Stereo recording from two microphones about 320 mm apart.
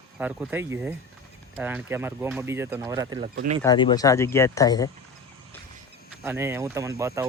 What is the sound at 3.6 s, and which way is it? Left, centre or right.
Speech, centre.